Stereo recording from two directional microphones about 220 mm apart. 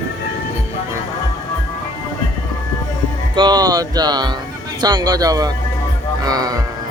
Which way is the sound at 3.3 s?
20° right (ahead or behind).